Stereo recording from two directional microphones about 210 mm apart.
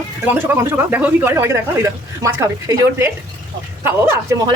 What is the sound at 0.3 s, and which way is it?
Speech, 10° right (ahead or behind).